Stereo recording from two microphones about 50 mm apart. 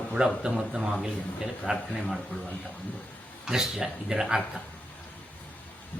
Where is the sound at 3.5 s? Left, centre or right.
Centre.